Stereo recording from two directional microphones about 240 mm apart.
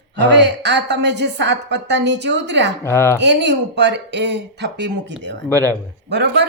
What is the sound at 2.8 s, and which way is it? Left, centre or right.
Speech, centre.